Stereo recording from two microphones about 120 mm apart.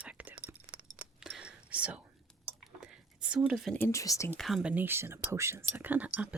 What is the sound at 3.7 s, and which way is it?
Speech, 20° left (ahead or behind).